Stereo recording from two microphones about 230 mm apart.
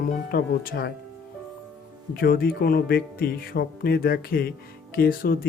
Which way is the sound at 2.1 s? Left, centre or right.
Left.